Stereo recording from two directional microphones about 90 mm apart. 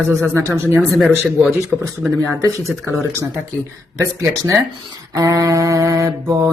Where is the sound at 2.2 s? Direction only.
30° right (ahead or behind).